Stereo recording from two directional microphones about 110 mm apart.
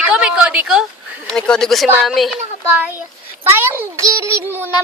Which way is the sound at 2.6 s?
15° right (ahead or behind).